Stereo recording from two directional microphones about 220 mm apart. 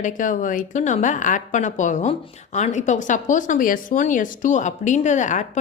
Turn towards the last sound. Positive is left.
turn(degrees=35)  # may be behind; listen again after turning